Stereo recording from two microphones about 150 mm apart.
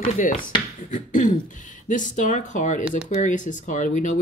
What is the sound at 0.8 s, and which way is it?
Speech, 60° left (ahead or behind).